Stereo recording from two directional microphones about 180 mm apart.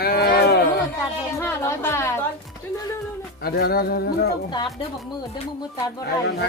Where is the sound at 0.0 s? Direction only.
55° left (ahead or behind).